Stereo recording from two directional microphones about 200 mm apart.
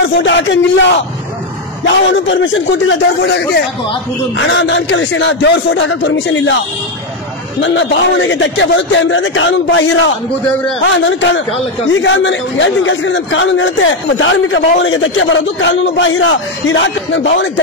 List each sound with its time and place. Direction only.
0.2 s a man's voice: 65° left (ahead or behind)
2.4 s a man's voice: 65° left (ahead or behind)
7.6 s a man's voice: 70° left (ahead or behind)